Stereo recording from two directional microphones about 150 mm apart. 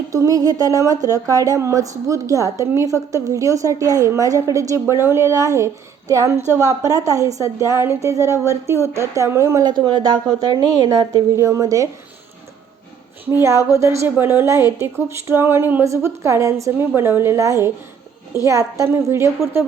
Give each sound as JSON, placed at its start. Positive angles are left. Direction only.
{"t": 0.1, "sound": "a woman's voice", "side_deg": -20}
{"t": 13.3, "sound": "a woman's voice", "side_deg": -20}